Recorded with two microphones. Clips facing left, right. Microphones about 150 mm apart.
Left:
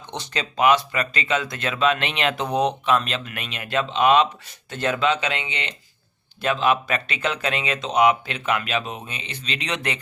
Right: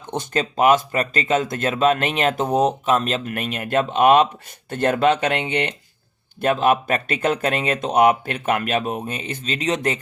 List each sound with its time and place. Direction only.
0.0 s speech: 50° right (ahead or behind)